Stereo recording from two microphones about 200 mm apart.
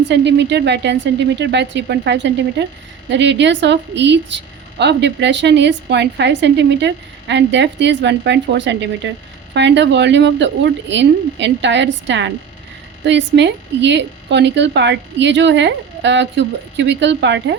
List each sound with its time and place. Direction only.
0.1 s a woman's voice: 60° right (ahead or behind)